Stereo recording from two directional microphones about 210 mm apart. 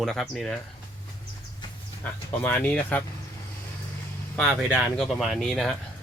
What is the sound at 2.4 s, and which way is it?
Speech, 10° left (ahead or behind).